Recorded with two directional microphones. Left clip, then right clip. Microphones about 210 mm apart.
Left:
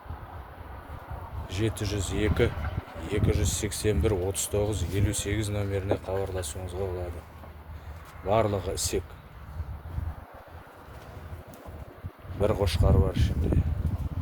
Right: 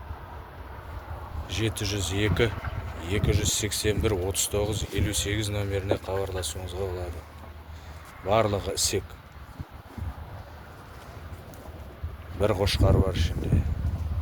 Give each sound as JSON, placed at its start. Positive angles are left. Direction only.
{"t": 1.5, "sound": "speech", "side_deg": 20}
{"t": 8.3, "sound": "speech", "side_deg": 5}
{"t": 12.4, "sound": "speech", "side_deg": 0}